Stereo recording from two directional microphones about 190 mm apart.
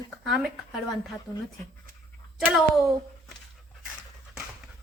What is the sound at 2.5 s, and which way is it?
Speech, centre (ahead or behind).